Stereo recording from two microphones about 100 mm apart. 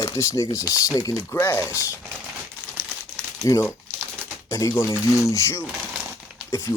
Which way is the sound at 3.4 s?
30° left (ahead or behind).